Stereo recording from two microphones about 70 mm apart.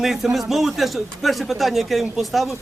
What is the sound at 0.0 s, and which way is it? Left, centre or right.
A man's voice, centre.